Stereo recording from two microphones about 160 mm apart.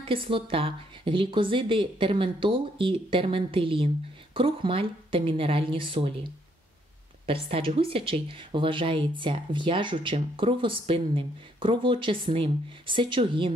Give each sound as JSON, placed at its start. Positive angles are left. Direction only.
{"t": 0.0, "sound": "speech", "side_deg": -35}
{"t": 7.2, "sound": "speech", "side_deg": -35}